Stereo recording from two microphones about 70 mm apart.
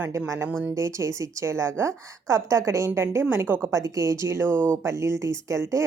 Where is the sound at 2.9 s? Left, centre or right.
Right.